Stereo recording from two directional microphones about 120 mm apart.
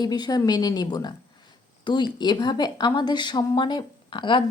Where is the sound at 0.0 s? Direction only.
35° left (ahead or behind).